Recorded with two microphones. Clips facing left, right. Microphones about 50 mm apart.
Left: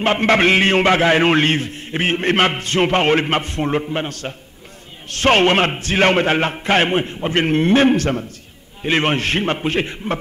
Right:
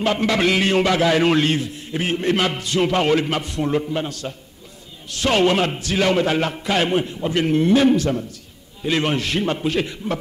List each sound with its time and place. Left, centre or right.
0.0 s a man's voice: left